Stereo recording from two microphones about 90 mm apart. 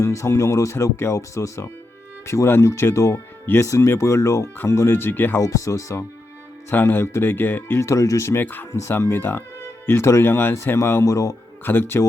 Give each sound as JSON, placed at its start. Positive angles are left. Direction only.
{"t": 0.0, "sound": "speech", "side_deg": 35}
{"t": 5.4, "sound": "speech", "side_deg": 35}
{"t": 11.6, "sound": "speech", "side_deg": 25}